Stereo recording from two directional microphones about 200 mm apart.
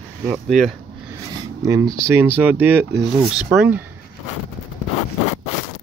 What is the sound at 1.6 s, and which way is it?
Speech, 15° right (ahead or behind).